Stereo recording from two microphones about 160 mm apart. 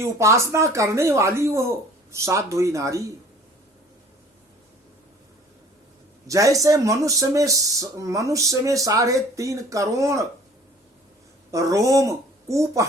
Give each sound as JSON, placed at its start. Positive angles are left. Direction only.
{"t": 0.0, "sound": "speech", "side_deg": -20}
{"t": 6.2, "sound": "speech", "side_deg": -20}
{"t": 11.5, "sound": "speech", "side_deg": -20}